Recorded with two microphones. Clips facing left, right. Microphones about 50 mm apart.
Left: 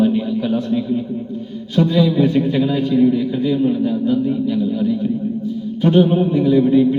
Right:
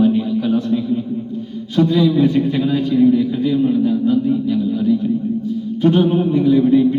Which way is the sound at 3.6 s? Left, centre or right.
Centre.